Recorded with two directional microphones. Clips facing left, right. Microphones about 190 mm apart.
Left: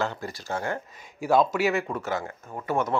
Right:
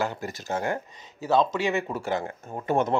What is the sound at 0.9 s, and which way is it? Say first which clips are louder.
Speech: left 2 dB; 10° left (ahead or behind).